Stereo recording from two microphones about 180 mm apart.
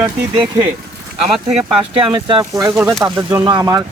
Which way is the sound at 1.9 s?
25° right (ahead or behind).